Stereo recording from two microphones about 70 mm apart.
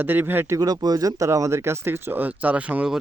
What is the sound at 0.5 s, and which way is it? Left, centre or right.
Speech, right.